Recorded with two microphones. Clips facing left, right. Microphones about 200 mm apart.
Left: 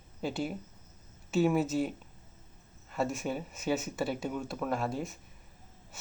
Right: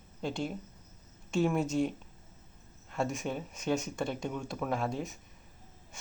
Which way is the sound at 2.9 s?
Centre (ahead or behind).